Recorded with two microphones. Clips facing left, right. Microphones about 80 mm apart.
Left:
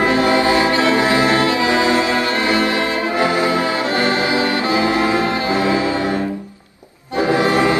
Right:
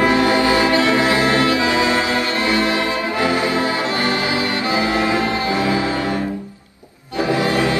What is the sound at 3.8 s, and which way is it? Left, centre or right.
Music, left.